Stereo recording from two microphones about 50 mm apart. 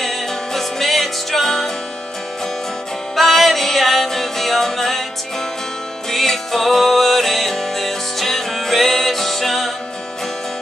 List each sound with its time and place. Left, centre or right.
0.0 s music: centre
3.2 s music: centre
6.0 s music: centre